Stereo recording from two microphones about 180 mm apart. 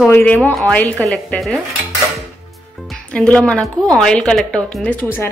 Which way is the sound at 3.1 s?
5° left (ahead or behind).